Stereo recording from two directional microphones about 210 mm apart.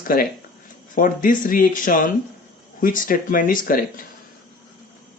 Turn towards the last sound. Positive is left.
turn(degrees=40)  # may be behind; listen again after turning